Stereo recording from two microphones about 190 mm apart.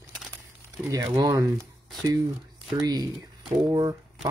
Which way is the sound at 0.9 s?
20° right (ahead or behind).